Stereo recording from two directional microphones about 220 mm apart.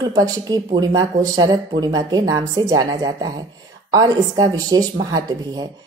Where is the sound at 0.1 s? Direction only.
15° right (ahead or behind).